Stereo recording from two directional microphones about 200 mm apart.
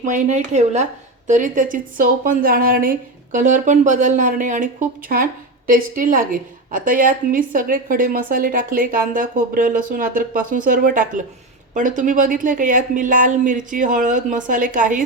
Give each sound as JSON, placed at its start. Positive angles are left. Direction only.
{"t": 0.0, "sound": "a woman's voice", "side_deg": -35}